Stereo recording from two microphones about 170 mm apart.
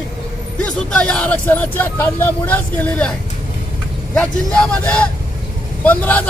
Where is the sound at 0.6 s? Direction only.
5° left (ahead or behind).